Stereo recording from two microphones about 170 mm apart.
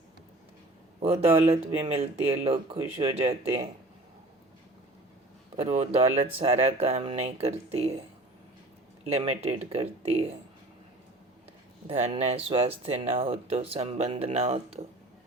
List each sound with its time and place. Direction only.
0.9 s speech: 35° right (ahead or behind)
5.5 s speech: 40° right (ahead or behind)
9.0 s speech: 35° right (ahead or behind)
11.9 s speech: 35° right (ahead or behind)